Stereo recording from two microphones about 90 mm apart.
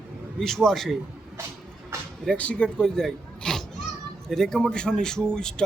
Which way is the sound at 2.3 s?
15° left (ahead or behind).